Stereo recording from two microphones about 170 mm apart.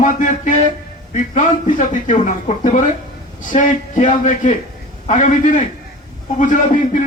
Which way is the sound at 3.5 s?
50° left (ahead or behind).